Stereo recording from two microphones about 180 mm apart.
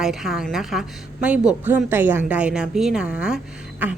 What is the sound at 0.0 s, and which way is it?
A woman's voice, centre (ahead or behind).